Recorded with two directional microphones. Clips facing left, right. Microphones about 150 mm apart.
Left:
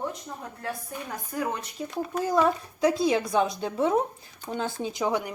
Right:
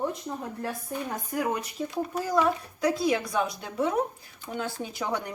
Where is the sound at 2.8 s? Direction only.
25° left (ahead or behind).